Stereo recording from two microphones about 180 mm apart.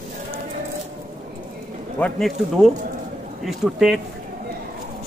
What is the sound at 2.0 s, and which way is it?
Speech, centre (ahead or behind).